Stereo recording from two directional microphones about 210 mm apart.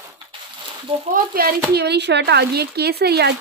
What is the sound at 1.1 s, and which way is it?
Speech, 45° right (ahead or behind).